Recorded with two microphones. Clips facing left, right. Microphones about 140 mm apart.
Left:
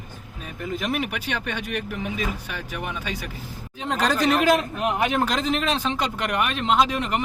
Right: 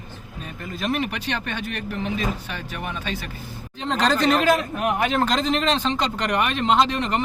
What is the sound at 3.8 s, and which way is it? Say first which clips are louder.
Speech: right 2 dB; 10° left (ahead or behind).